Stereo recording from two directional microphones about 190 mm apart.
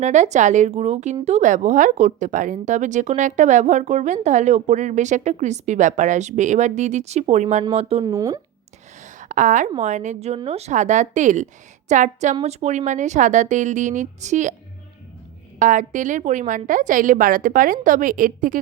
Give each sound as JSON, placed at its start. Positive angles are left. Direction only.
{"t": 0.0, "sound": "a woman's voice", "side_deg": -40}
{"t": 8.1, "sound": "speech", "side_deg": -15}
{"t": 9.0, "sound": "a woman's voice", "side_deg": -40}
{"t": 15.5, "sound": "a woman's voice", "side_deg": -40}